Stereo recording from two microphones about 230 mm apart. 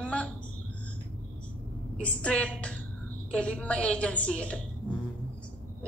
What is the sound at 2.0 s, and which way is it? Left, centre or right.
A woman's voice, centre.